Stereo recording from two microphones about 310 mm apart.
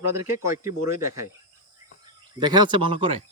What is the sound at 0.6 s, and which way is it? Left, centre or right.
Speech, centre.